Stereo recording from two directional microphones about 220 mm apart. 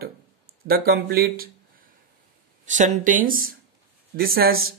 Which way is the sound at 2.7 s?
35° right (ahead or behind).